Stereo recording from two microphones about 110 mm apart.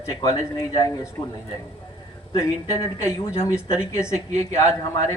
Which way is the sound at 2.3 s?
30° left (ahead or behind).